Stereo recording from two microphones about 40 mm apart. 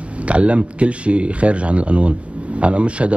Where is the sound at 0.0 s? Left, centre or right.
Right.